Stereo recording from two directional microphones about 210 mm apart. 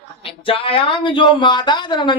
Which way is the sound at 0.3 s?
25° left (ahead or behind).